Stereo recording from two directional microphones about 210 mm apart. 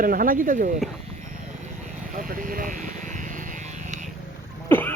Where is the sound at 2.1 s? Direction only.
40° right (ahead or behind).